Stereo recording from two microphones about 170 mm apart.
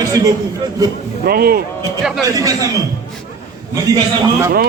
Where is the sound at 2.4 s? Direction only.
20° right (ahead or behind).